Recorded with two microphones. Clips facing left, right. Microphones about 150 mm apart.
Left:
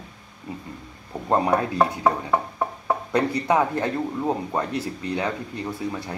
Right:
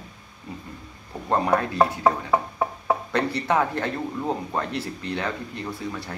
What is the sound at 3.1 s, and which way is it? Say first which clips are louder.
A man's voice: left 4 dB; 15° left (ahead or behind).